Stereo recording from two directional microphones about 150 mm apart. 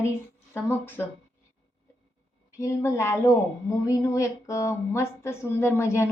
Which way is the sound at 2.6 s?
20° left (ahead or behind).